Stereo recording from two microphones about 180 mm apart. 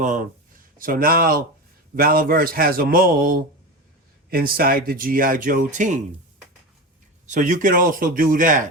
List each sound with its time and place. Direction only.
0.8 s a man's voice: 50° right (ahead or behind)
7.3 s speech: 45° right (ahead or behind)